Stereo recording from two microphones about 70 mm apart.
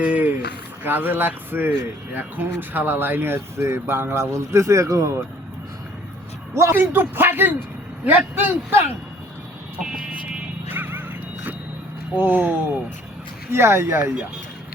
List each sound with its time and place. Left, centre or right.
0.0 s a sound: right
0.9 s speech: right
6.5 s speech: right
6.7 s speech: right
10.7 s music: right
12.1 s speech: right